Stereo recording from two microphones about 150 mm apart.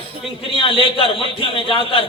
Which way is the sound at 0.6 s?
35° left (ahead or behind).